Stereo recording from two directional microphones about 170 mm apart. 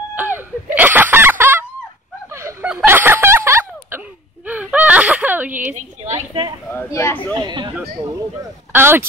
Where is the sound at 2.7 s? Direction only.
10° right (ahead or behind).